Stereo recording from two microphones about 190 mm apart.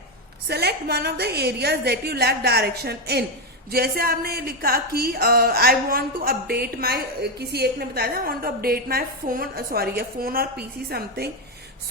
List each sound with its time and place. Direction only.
0.4 s a woman's voice: 60° right (ahead or behind)